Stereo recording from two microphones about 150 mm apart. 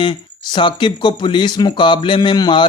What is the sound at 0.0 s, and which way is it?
Speech, 30° left (ahead or behind).